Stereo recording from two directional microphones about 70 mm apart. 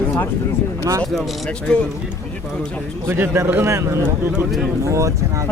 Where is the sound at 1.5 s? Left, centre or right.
Centre.